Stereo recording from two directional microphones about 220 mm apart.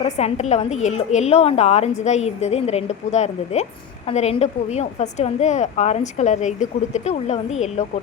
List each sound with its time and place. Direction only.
0.0 s a woman's voice: 30° left (ahead or behind)